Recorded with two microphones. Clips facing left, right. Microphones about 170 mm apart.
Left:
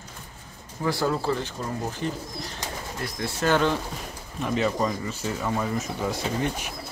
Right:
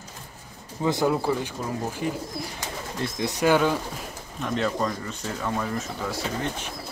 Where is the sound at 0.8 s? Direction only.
15° right (ahead or behind).